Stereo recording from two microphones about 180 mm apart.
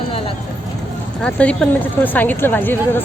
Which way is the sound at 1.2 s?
5° left (ahead or behind).